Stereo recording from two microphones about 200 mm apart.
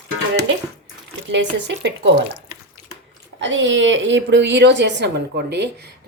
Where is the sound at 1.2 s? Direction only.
60° right (ahead or behind).